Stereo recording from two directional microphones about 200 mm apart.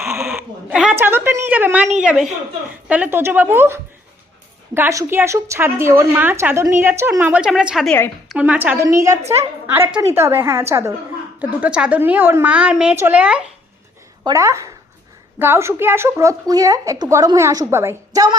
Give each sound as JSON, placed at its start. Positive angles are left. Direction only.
{"t": 0.0, "sound": "sheep", "side_deg": -10}
{"t": 2.0, "sound": "a woman's voice", "side_deg": -5}
{"t": 14.3, "sound": "a woman's voice", "side_deg": -15}